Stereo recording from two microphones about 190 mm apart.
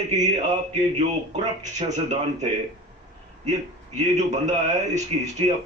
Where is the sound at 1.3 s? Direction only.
35° right (ahead or behind).